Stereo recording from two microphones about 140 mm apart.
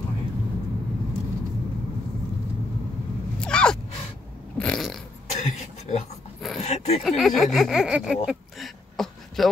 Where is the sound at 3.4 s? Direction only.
5° left (ahead or behind).